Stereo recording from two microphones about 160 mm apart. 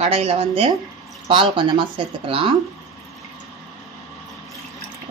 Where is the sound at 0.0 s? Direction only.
40° right (ahead or behind).